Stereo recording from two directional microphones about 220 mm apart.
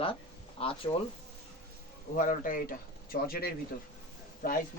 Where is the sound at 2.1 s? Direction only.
35° left (ahead or behind).